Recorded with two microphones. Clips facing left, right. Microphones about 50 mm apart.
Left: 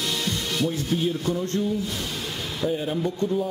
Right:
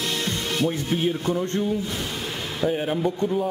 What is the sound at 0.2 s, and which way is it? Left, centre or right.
Music, right.